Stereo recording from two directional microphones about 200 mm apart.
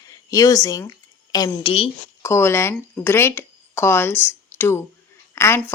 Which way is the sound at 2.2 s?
15° left (ahead or behind).